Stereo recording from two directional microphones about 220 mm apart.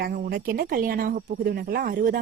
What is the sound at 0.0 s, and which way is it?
Speech, 40° right (ahead or behind).